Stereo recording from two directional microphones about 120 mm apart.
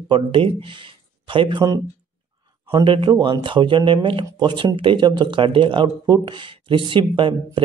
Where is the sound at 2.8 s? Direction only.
45° right (ahead or behind).